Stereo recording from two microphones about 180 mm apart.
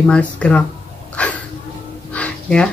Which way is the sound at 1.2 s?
5° left (ahead or behind).